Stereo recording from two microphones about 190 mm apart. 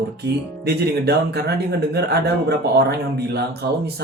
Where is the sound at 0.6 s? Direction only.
60° right (ahead or behind).